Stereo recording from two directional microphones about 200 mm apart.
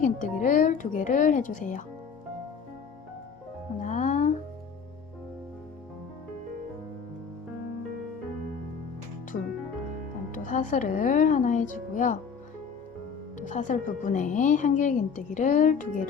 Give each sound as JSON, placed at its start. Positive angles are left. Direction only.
{"t": 0.0, "sound": "music", "side_deg": 40}
{"t": 3.8, "sound": "music", "side_deg": 35}
{"t": 10.3, "sound": "a woman's voice", "side_deg": 40}
{"t": 13.4, "sound": "a woman's voice", "side_deg": 40}